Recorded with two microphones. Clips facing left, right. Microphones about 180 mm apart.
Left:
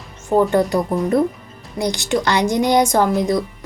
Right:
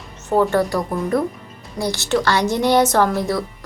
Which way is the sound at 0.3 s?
15° left (ahead or behind).